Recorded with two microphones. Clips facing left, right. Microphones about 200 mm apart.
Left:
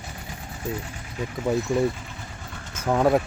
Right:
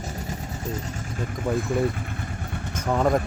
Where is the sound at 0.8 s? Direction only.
45° right (ahead or behind).